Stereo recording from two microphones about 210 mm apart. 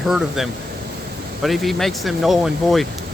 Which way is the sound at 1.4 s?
Centre (ahead or behind).